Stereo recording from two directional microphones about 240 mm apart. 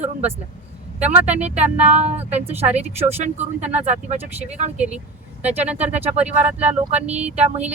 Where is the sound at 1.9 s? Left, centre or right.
Right.